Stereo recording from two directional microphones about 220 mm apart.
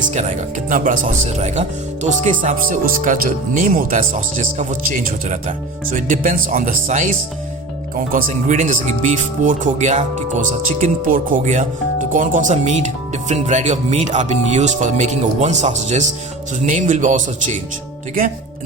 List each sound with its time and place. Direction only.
0.1 s speech: 35° right (ahead or behind)
8.1 s speech: 35° right (ahead or behind)